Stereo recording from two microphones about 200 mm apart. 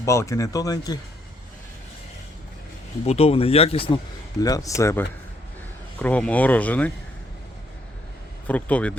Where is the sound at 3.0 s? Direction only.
30° left (ahead or behind).